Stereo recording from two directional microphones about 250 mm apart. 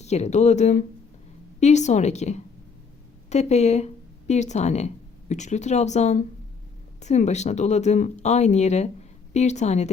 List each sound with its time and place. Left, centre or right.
0.0 s speech: left